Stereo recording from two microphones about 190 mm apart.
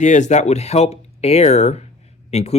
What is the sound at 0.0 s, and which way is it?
Speech, 40° left (ahead or behind).